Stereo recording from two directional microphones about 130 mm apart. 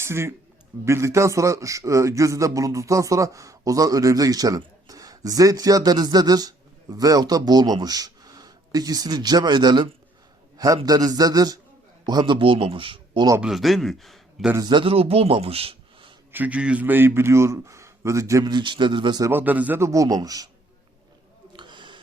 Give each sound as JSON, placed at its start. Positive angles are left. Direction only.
{"t": 0.0, "sound": "a man's voice", "side_deg": -20}
{"t": 13.4, "sound": "a man's voice", "side_deg": 0}
{"t": 14.5, "sound": "a man's voice", "side_deg": -35}
{"t": 16.3, "sound": "a man's voice", "side_deg": -10}
{"t": 19.2, "sound": "a man's voice", "side_deg": -15}
{"t": 21.5, "sound": "a sound", "side_deg": -35}